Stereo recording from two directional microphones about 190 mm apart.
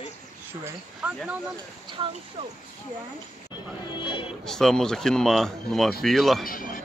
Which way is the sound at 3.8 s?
25° left (ahead or behind).